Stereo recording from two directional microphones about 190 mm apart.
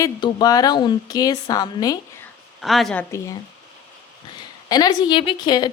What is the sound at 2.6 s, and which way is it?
Speech, centre (ahead or behind).